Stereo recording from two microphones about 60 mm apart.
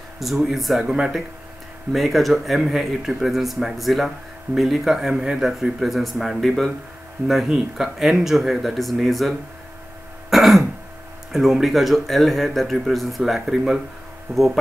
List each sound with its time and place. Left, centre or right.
0.2 s speech: centre
10.3 s throat clearing: centre
11.3 s speech: centre